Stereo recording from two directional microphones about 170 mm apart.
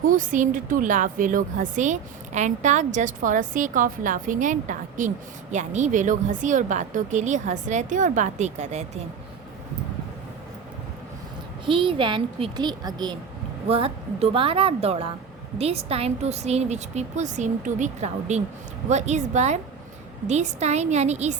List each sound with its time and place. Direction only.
0.0 s a woman's voice: 50° right (ahead or behind)
11.6 s a woman's voice: 30° right (ahead or behind)